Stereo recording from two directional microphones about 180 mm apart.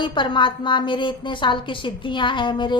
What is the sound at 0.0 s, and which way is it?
A woman's voice, 25° left (ahead or behind).